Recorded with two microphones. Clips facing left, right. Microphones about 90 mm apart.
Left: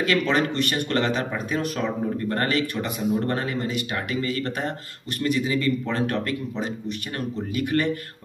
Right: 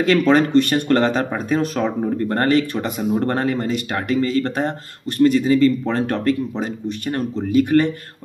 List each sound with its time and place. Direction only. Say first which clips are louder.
0.0 s speech: right 7 dB; 35° right (ahead or behind)